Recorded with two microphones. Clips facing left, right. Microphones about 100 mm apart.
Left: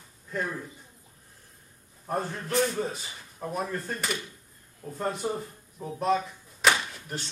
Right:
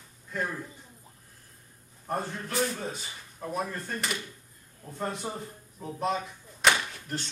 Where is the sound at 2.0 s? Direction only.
5° left (ahead or behind).